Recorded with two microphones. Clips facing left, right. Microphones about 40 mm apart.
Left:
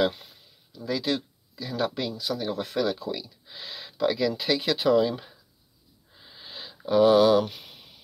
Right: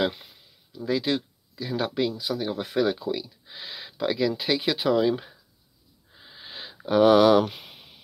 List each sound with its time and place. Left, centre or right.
0.0 s speech: right
6.1 s wheeze: centre
6.5 s a sound: right
6.9 s speech: right